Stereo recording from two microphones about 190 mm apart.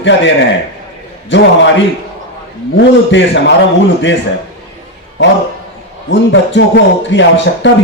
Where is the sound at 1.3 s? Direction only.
70° left (ahead or behind).